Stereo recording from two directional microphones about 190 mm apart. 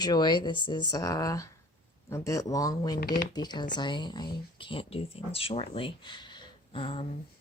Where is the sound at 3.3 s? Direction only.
20° left (ahead or behind).